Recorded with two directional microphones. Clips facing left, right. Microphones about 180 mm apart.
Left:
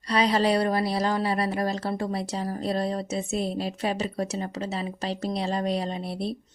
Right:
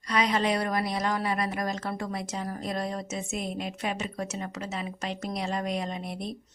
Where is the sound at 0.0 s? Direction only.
30° left (ahead or behind).